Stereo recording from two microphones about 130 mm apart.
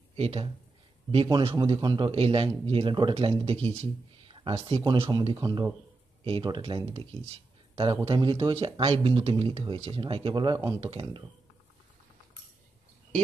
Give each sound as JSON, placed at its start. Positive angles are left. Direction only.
{"t": 0.2, "sound": "a man's voice", "side_deg": -45}
{"t": 3.8, "sound": "a sound", "side_deg": -40}
{"t": 4.6, "sound": "a man's voice", "side_deg": -45}